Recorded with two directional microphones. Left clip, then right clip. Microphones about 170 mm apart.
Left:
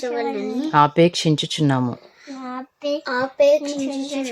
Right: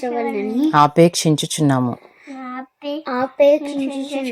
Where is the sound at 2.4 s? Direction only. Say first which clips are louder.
Left 1 dB; 15° left (ahead or behind).